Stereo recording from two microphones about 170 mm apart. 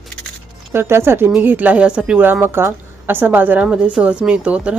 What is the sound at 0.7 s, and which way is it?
Speech, 15° right (ahead or behind).